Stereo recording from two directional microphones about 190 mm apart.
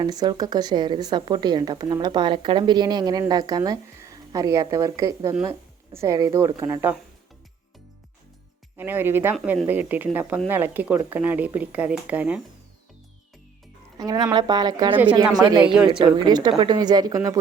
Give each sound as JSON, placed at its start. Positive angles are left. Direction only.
{"t": 0.0, "sound": "speech", "side_deg": -20}
{"t": 8.8, "sound": "speech", "side_deg": -10}
{"t": 9.3, "sound": "speech", "side_deg": 0}
{"t": 14.0, "sound": "speech", "side_deg": -20}